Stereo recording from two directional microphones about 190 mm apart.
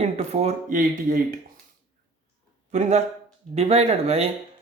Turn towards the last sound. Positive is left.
turn(degrees=-35)  # may be behind; listen again after turning